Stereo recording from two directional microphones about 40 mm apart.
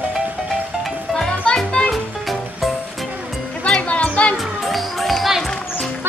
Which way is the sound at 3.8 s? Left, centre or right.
Left.